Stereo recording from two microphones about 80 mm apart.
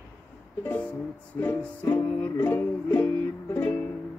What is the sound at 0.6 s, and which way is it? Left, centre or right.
Music, left.